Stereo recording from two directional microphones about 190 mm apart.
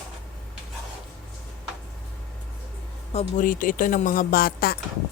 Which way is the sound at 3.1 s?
40° left (ahead or behind).